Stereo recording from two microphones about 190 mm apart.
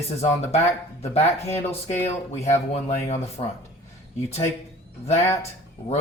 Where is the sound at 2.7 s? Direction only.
35° left (ahead or behind).